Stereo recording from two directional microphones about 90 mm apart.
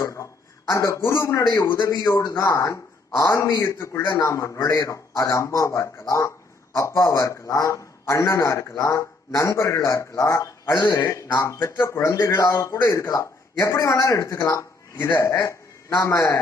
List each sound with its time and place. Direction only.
0.0 s a man's voice: 35° left (ahead or behind)
12.4 s a man's voice: 40° left (ahead or behind)